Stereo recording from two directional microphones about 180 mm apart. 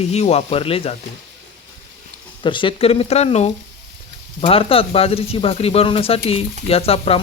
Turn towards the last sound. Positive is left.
turn(degrees=35)  # may be behind; listen again after turning